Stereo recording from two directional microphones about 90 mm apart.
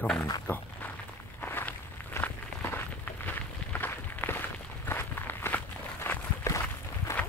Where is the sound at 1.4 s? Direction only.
20° left (ahead or behind).